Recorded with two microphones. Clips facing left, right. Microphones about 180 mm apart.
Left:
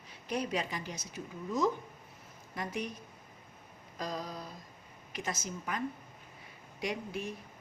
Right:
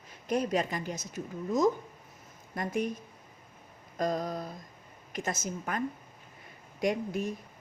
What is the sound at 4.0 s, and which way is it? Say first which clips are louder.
A woman's voice: right 8 dB; 50° right (ahead or behind).